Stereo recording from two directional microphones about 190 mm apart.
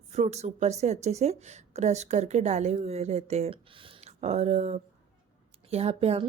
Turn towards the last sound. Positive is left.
turn(degrees=-35)  # may be behind; listen again after turning